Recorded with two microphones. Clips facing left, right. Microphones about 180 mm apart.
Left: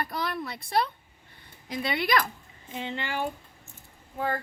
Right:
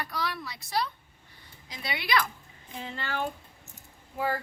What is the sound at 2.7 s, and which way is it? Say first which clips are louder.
Speech: left 5 dB; 25° left (ahead or behind).